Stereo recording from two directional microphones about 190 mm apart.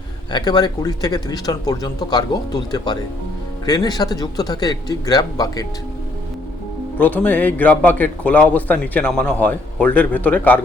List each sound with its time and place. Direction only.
0.3 s speech: 20° left (ahead or behind)
7.0 s a man's voice: 10° left (ahead or behind)